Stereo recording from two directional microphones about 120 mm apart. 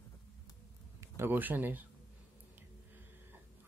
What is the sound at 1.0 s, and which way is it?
Speech, 20° right (ahead or behind).